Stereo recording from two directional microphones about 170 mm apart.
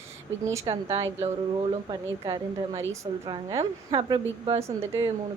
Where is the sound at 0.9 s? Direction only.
20° right (ahead or behind).